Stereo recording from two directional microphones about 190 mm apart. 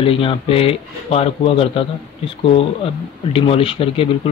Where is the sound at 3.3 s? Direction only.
30° left (ahead or behind).